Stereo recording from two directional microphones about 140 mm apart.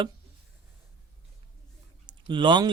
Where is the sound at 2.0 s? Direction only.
35° right (ahead or behind).